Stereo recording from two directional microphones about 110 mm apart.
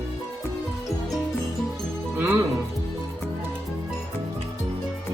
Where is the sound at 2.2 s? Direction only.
20° right (ahead or behind).